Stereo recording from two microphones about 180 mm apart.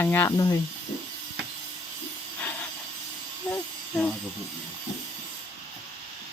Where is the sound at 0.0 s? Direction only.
10° left (ahead or behind).